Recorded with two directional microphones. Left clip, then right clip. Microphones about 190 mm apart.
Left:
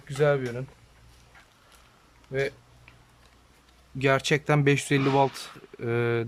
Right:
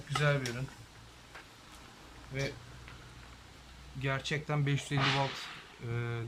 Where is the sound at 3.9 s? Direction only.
60° left (ahead or behind).